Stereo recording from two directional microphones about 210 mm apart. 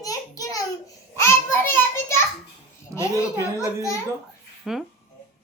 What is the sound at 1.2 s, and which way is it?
A child's voice, 10° left (ahead or behind).